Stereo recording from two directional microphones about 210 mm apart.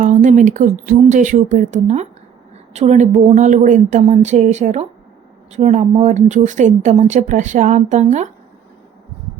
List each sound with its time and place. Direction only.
0.0 s a woman's voice: 35° right (ahead or behind)